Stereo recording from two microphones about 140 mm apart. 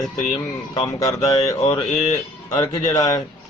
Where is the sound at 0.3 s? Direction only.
30° left (ahead or behind).